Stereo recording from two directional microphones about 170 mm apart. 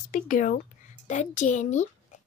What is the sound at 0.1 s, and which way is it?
Speech, 50° left (ahead or behind).